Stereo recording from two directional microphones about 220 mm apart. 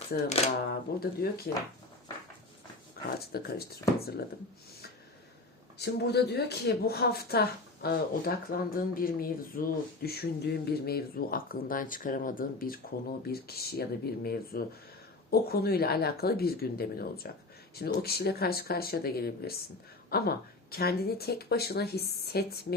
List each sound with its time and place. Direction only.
0.1 s speech: 30° left (ahead or behind)
0.7 s speech: 45° left (ahead or behind)
2.9 s speech: 45° left (ahead or behind)
5.8 s speech: 45° left (ahead or behind)